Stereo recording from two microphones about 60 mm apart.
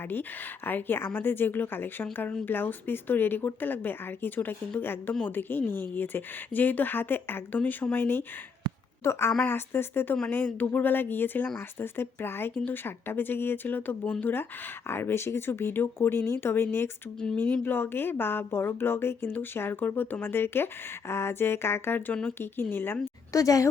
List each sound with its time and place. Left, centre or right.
0.1 s a woman's voice: left
10.2 s speech: left
14.0 s speech: left
14.8 s speech: left
23.3 s a woman's voice: left